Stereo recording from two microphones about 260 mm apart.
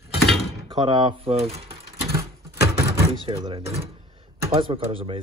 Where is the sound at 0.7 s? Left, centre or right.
Centre.